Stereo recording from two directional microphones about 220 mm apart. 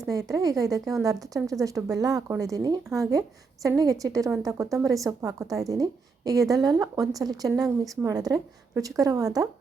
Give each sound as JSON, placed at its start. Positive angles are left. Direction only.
{"t": 0.1, "sound": "a woman's voice", "side_deg": -15}